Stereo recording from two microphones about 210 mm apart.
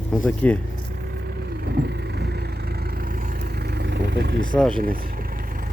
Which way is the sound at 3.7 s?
50° right (ahead or behind).